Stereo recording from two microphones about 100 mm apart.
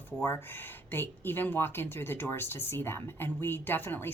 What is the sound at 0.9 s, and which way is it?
Speech, 20° left (ahead or behind).